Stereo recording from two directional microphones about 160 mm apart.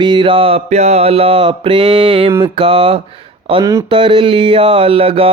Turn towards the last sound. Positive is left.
turn(degrees=-35)  # may be behind; listen again after turning